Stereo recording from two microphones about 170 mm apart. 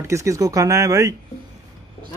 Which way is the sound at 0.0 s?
15° right (ahead or behind).